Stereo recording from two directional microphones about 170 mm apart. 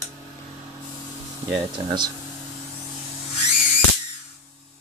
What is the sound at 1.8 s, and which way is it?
Speech, 35° right (ahead or behind).